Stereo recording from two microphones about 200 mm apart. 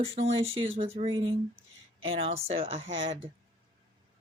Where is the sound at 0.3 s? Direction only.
75° right (ahead or behind).